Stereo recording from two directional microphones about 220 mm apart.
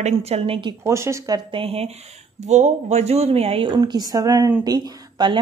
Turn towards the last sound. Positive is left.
turn(degrees=-20)  # may be behind; listen again after turning